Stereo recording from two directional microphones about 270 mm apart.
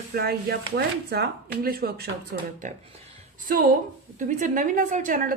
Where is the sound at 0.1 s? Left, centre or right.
Right.